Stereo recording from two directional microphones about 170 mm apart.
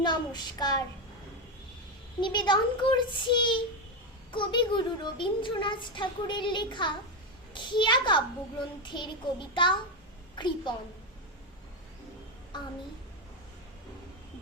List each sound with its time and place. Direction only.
0.0 s speech: 25° left (ahead or behind)
2.2 s a woman's voice: 25° left (ahead or behind)